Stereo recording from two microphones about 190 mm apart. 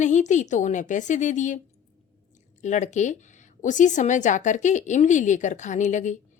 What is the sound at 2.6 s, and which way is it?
Speech, 40° left (ahead or behind).